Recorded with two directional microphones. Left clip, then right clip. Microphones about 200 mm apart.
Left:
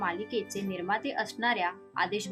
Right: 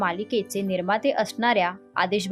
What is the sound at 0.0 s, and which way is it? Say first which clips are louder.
Speech: right 7 dB; 50° right (ahead or behind).